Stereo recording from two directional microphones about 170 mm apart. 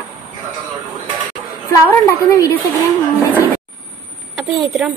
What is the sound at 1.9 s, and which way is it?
Speech, 15° left (ahead or behind).